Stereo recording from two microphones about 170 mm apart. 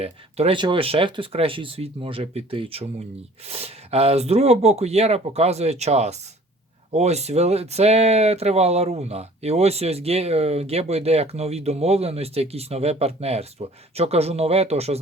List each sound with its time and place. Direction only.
0.0 s speech: 35° right (ahead or behind)